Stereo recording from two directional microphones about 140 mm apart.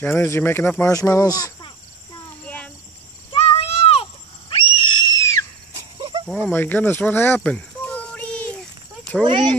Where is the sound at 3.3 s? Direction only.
45° left (ahead or behind); by 5.5 s 25° left (ahead or behind).